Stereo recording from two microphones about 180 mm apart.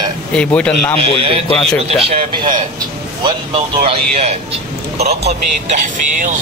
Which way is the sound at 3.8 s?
40° right (ahead or behind).